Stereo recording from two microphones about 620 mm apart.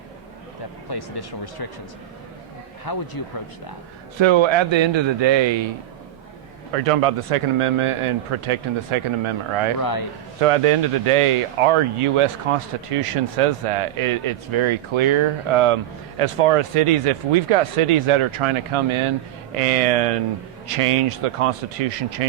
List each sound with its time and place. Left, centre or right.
0.9 s speech: left
2.8 s speech: left
4.2 s speech: right
6.8 s speech: right
9.8 s speech: left
10.4 s speech: right
19.5 s speech: right